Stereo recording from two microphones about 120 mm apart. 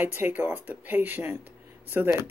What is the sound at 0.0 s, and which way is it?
Speech, 15° right (ahead or behind).